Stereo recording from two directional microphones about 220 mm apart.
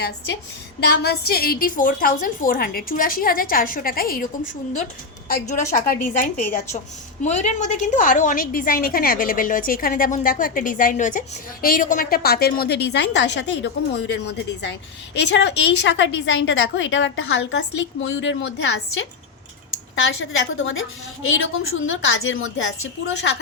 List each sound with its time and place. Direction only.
0.8 s a woman's voice: 45° left (ahead or behind)
5.7 s a woman's voice: 40° left (ahead or behind)
7.3 s a woman's voice: 30° left (ahead or behind); by 23.4 s 65° left (ahead or behind)